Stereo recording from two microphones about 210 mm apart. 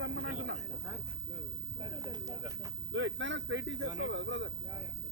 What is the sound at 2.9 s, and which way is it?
Speech, 60° right (ahead or behind).